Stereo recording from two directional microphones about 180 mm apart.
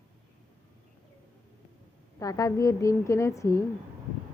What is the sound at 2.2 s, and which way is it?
A woman's voice, 20° left (ahead or behind).